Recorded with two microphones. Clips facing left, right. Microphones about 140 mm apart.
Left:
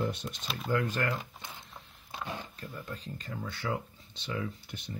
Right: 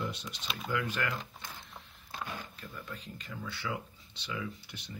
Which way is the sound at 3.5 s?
50° left (ahead or behind).